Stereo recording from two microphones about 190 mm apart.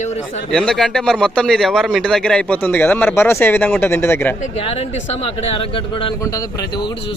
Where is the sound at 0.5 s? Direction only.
5° left (ahead or behind).